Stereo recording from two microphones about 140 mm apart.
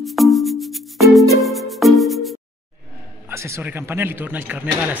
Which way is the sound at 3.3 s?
20° right (ahead or behind).